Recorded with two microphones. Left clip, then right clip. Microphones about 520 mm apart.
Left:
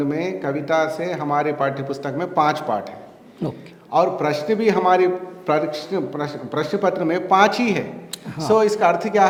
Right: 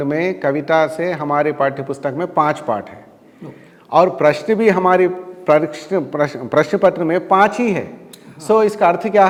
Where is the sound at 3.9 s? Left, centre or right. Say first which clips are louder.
Right 6 dB; right.